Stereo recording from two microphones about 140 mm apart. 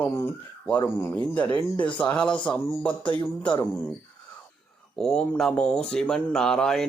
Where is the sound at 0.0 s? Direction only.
15° left (ahead or behind).